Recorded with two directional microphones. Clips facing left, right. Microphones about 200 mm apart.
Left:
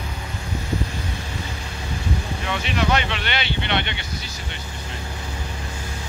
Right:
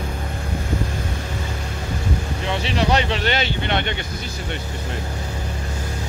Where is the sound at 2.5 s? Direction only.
30° right (ahead or behind).